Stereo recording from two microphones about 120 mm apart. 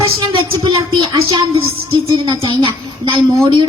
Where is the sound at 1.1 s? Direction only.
50° right (ahead or behind).